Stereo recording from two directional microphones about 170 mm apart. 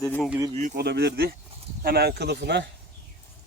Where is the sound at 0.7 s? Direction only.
75° right (ahead or behind).